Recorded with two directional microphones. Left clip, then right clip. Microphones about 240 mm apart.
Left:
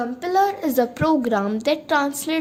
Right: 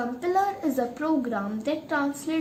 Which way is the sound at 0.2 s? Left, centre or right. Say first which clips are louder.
Left 6 dB; left.